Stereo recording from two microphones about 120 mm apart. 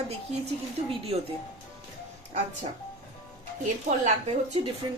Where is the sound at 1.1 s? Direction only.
50° right (ahead or behind).